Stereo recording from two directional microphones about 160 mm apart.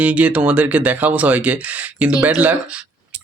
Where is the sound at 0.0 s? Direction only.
10° right (ahead or behind).